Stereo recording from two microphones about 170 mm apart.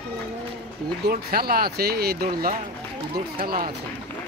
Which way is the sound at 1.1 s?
65° right (ahead or behind).